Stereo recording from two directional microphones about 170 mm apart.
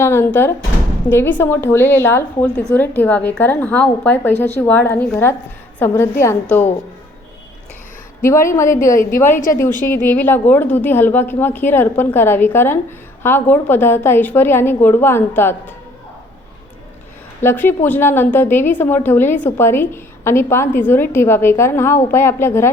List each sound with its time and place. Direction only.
0.0 s a woman's voice: 15° left (ahead or behind)
8.2 s a woman's voice: 15° left (ahead or behind)
17.4 s a woman's voice: 15° left (ahead or behind)